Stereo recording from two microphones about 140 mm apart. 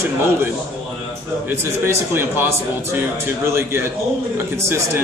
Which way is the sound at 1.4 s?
20° right (ahead or behind).